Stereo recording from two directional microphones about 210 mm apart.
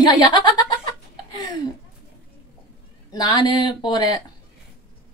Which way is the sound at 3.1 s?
20° left (ahead or behind).